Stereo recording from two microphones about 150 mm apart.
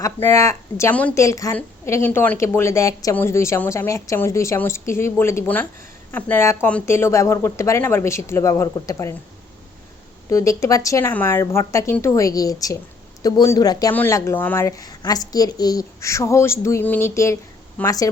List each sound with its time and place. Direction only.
0.0 s a woman's voice: 20° left (ahead or behind)
10.2 s a woman's voice: 20° left (ahead or behind)
13.9 s a woman's voice: 15° left (ahead or behind)